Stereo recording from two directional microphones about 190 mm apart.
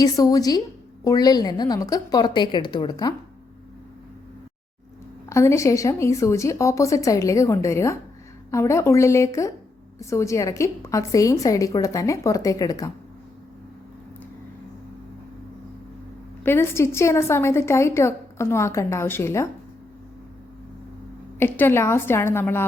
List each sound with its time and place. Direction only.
0.0 s a woman's voice: 20° left (ahead or behind)
5.3 s a woman's voice: 15° left (ahead or behind)
16.4 s a woman's voice: 15° left (ahead or behind)
21.3 s a woman's voice: 10° left (ahead or behind)